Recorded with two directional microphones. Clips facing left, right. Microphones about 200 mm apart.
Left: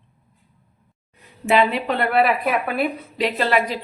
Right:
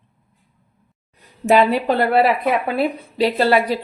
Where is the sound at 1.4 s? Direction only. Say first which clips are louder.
Right 4 dB; 40° right (ahead or behind).